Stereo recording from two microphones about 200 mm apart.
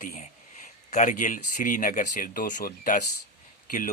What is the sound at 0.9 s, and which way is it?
Speech, 35° left (ahead or behind).